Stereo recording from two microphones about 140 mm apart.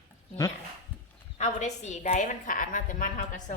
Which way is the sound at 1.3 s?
55° left (ahead or behind).